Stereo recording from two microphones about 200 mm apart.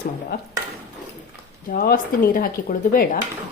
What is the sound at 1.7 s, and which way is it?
A woman's voice, 45° left (ahead or behind).